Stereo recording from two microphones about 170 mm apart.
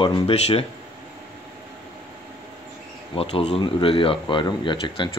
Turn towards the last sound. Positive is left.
turn(degrees=30)  # may be behind; listen again after turning